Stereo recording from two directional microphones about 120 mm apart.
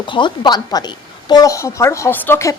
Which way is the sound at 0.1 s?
40° left (ahead or behind).